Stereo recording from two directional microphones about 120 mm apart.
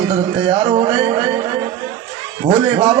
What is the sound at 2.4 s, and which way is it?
Speech, 50° right (ahead or behind).